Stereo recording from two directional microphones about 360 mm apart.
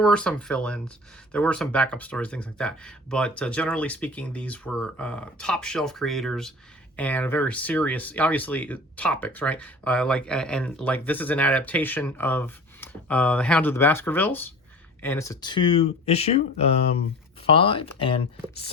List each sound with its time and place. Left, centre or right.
0.0 s speech: centre